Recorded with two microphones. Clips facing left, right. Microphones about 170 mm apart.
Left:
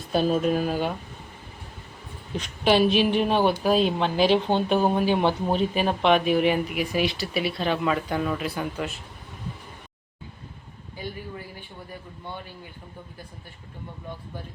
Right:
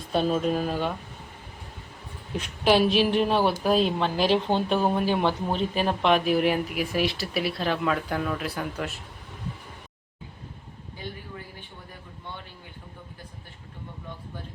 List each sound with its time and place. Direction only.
0.1 s speech: centre (ahead or behind)
2.3 s speech: 5° right (ahead or behind)